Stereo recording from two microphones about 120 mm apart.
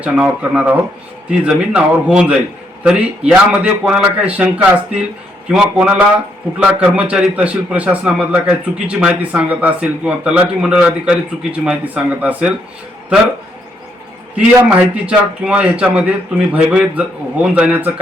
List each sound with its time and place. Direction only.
0.0 s a man's voice: 10° right (ahead or behind)
14.3 s a man's voice: 10° right (ahead or behind)